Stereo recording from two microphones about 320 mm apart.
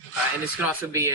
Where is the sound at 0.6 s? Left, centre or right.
Centre.